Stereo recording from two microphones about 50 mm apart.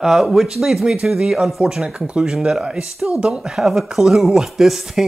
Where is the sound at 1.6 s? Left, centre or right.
Centre.